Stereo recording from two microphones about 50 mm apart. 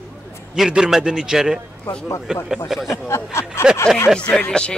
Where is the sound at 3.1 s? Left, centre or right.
Left.